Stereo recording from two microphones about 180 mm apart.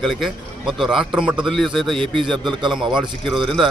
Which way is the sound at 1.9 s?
30° right (ahead or behind).